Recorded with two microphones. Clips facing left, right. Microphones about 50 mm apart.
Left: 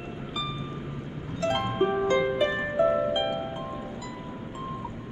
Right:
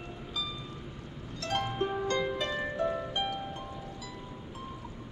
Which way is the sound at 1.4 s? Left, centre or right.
Centre.